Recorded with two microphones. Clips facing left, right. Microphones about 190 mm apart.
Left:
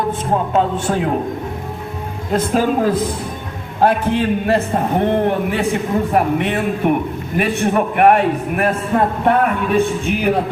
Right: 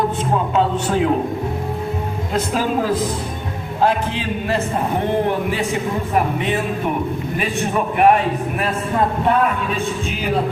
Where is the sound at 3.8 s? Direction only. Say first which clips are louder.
Left 5 dB; 55° left (ahead or behind).